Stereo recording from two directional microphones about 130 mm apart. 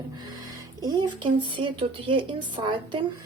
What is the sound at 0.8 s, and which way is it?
Speech, 35° right (ahead or behind).